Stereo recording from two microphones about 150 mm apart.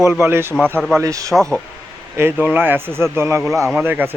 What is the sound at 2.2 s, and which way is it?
Speech, 15° right (ahead or behind).